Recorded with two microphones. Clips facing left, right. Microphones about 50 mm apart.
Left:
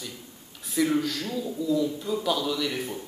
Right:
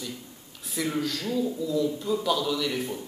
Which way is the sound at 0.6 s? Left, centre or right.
Centre.